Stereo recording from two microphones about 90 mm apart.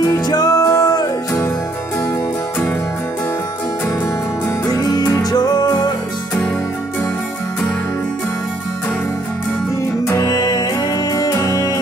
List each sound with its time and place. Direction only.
0.0 s music: 45° left (ahead or behind)
4.6 s music: 45° left (ahead or behind)
10.0 s music: 40° left (ahead or behind)